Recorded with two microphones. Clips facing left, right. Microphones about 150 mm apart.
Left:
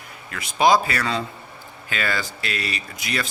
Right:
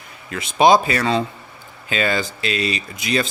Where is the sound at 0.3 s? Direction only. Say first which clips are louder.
Right 4 dB; 20° right (ahead or behind).